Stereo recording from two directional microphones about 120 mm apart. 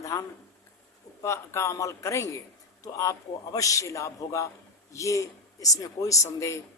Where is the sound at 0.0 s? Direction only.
25° left (ahead or behind).